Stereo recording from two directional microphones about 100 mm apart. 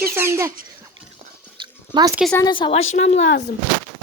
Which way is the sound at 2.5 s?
50° left (ahead or behind).